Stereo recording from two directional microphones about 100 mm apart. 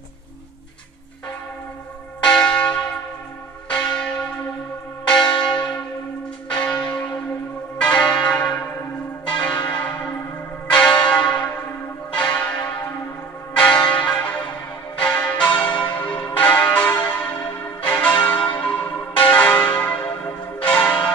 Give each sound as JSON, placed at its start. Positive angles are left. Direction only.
{"t": 2.2, "sound": "church bell", "side_deg": 10}
{"t": 6.5, "sound": "church bell", "side_deg": 10}
{"t": 13.6, "sound": "church bell", "side_deg": 10}